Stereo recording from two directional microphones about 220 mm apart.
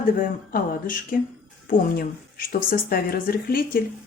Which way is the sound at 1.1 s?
40° left (ahead or behind).